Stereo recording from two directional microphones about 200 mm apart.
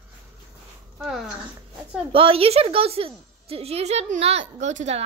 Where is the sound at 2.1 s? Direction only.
25° right (ahead or behind).